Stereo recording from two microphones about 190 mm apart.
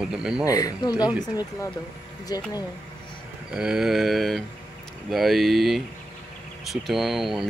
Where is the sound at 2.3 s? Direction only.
20° left (ahead or behind).